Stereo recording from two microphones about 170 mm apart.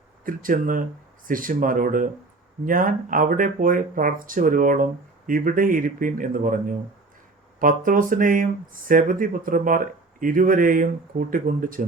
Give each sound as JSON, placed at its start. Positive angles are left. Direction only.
{"t": 0.3, "sound": "speech", "side_deg": -55}